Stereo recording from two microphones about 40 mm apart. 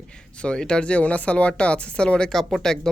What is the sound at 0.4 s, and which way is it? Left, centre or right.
Speech, left.